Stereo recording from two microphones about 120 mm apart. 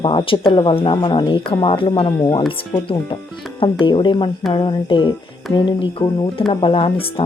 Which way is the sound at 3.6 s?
45° left (ahead or behind).